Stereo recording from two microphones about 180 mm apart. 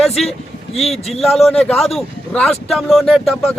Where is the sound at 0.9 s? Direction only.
35° left (ahead or behind).